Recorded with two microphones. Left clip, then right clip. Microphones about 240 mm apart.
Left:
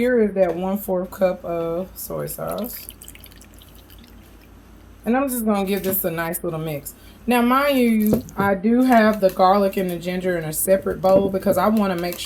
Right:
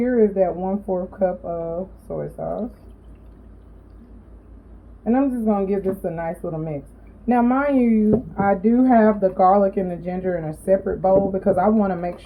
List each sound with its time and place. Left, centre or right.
0.0 s speech: left
5.0 s speech: left
6.4 s speech: left
7.3 s a woman's voice: left